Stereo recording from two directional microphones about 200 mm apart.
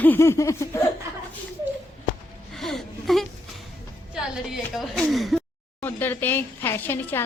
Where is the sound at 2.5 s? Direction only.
Centre (ahead or behind).